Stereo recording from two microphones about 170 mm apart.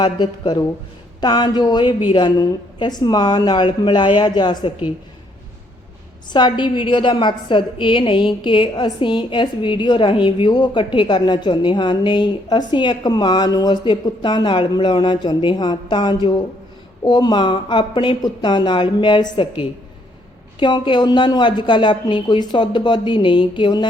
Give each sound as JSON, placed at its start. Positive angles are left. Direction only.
{"t": 0.0, "sound": "a woman's voice", "side_deg": 25}
{"t": 6.3, "sound": "a woman's voice", "side_deg": 25}
{"t": 20.6, "sound": "a woman's voice", "side_deg": 25}